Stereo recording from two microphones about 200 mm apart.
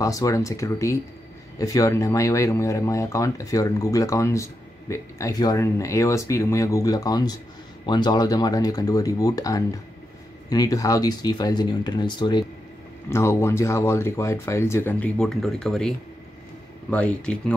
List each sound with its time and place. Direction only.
0.0 s speech: 15° left (ahead or behind)
16.9 s speech: 5° left (ahead or behind)